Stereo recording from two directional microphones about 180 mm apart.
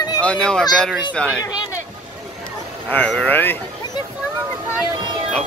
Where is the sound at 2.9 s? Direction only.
5° left (ahead or behind).